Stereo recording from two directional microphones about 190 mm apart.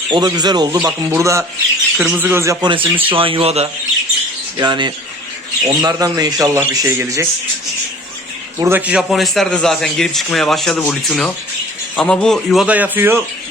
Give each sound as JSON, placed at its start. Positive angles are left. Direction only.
{"t": 0.1, "sound": "speech", "side_deg": -20}
{"t": 8.5, "sound": "a man's voice", "side_deg": -15}